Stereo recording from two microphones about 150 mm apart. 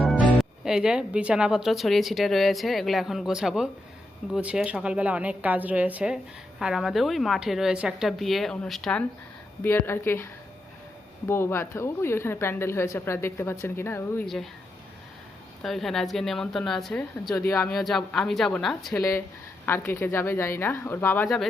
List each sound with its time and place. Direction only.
0.0 s a woman's voice: centre (ahead or behind)
9.6 s a woman's voice: 15° left (ahead or behind)
11.3 s a woman's voice: 15° left (ahead or behind)
15.6 s a woman's voice: centre (ahead or behind)
19.6 s a woman's voice: 15° left (ahead or behind)